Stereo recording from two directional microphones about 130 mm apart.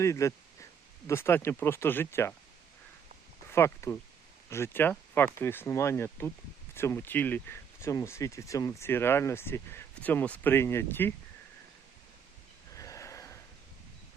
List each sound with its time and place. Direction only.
0.0 s speech: 25° left (ahead or behind)
3.4 s speech: 20° left (ahead or behind)
12.7 s a sound: 25° left (ahead or behind)